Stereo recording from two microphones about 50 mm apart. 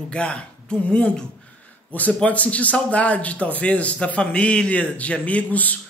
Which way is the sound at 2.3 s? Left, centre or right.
Left.